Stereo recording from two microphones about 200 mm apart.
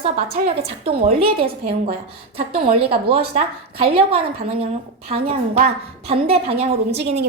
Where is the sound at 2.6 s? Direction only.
25° right (ahead or behind).